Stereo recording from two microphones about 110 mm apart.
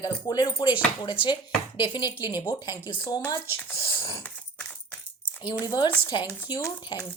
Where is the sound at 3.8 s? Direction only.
50° left (ahead or behind).